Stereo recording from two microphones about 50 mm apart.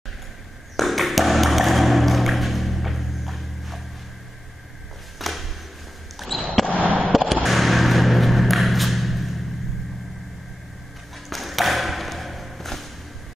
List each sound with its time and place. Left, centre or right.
0.7 s music: centre
5.2 s a sound: centre
6.1 s basketball bounce: centre
6.8 s fireworks: right
7.1 s a sound: centre
11.2 s ping: centre